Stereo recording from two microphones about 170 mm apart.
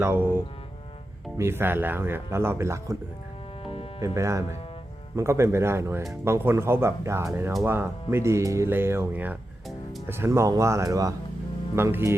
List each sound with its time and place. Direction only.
0.0 s speech: 10° right (ahead or behind)
3.6 s music: 35° left (ahead or behind)
4.0 s speech: 15° right (ahead or behind)